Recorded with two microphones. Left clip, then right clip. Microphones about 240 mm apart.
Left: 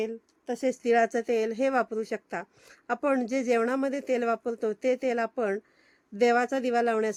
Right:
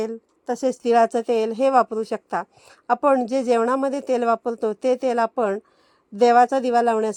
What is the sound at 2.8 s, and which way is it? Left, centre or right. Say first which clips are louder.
Speech: right 9 dB; centre.